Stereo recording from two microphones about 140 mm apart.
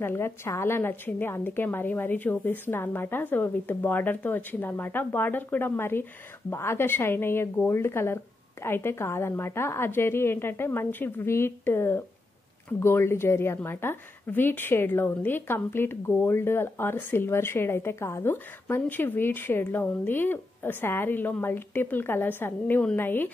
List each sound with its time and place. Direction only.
0.0 s a woman's voice: 15° left (ahead or behind)